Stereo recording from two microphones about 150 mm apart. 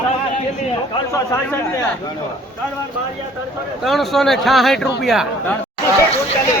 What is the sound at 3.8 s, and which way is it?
Speech, centre (ahead or behind).